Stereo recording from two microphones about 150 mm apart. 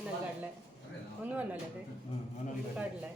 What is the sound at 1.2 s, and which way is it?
Speech, 10° right (ahead or behind).